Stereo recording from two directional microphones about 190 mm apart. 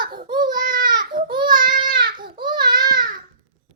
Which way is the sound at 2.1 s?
50° right (ahead or behind).